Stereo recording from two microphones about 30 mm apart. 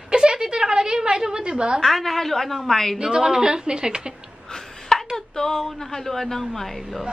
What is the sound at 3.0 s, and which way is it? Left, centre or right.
A woman's voice, right.